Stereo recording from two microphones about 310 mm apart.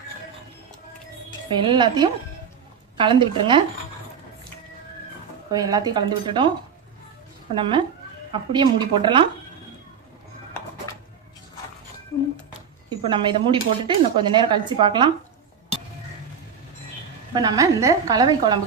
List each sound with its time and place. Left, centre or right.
1.5 s speech: centre
5.5 s speech: centre
7.5 s speech: centre
12.9 s speech: centre
17.3 s speech: centre